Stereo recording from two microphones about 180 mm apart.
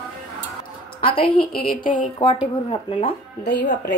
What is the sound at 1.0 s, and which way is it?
Speech, 30° left (ahead or behind).